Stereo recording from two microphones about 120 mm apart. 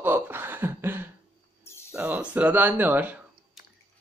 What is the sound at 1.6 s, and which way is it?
Cricket, 20° left (ahead or behind).